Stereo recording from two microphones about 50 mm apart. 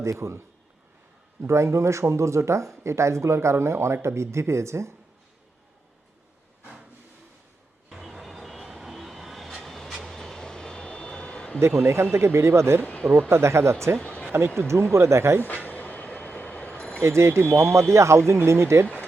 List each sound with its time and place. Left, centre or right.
0.0 s speech: right
7.9 s vehicle: centre; by 11.6 s left
11.6 s speech: right
12.8 s speech: left
13.1 s speech: right
14.0 s basketball bounce: left
14.9 s speech: right
15.4 s vehicle: left
17.0 s speech: right